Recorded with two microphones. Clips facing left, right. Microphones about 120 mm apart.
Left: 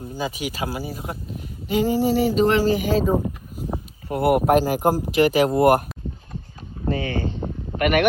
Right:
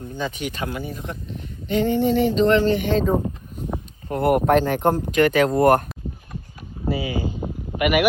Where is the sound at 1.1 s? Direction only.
5° left (ahead or behind).